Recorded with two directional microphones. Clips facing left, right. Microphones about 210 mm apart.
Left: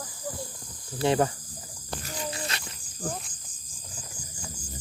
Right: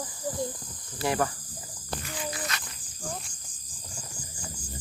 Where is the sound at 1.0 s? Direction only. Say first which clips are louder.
Left 4 dB; 25° left (ahead or behind).